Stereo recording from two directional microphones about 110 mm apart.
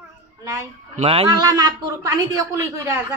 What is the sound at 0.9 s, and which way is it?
Speech, 70° right (ahead or behind).